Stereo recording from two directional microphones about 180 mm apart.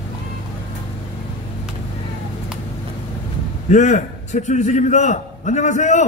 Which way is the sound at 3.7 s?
40° left (ahead or behind).